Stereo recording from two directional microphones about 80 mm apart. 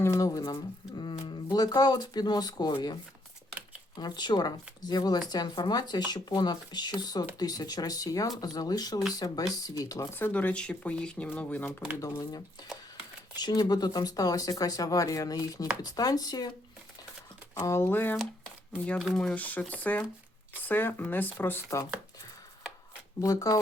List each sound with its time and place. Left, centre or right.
0.0 s a sound: left
0.3 s speech: left
1.2 s speech: left
10.2 s speech: left
13.3 s speech: left
17.5 s speech: left
19.1 s speech: centre
23.2 s speech: left